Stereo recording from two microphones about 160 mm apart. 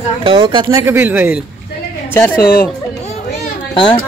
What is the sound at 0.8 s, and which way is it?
Speech, 15° right (ahead or behind).